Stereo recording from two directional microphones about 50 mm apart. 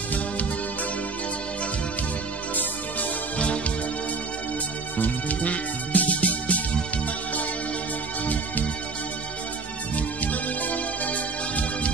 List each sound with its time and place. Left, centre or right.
2.5 s music: left
4.9 s music: left
9.9 s music: left